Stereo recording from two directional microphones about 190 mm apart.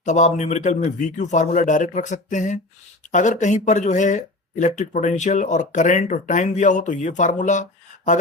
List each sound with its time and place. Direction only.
0.0 s speech: 40° left (ahead or behind)